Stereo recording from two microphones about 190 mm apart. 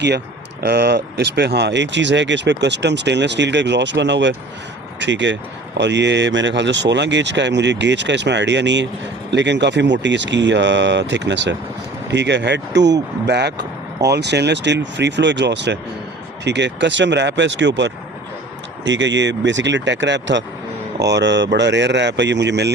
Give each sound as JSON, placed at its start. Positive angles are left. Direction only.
{"t": 0.6, "sound": "speech", "side_deg": -60}